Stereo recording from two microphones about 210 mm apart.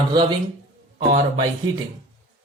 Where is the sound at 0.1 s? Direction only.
20° right (ahead or behind).